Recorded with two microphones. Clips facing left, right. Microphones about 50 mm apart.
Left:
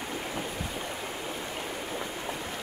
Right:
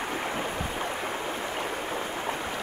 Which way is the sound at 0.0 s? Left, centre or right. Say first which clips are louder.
Right 4 dB; right.